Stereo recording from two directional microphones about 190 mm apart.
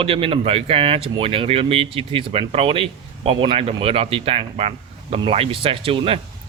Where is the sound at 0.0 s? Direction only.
30° right (ahead or behind).